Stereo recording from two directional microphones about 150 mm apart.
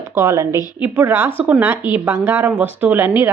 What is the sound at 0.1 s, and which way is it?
A woman's voice, 20° right (ahead or behind).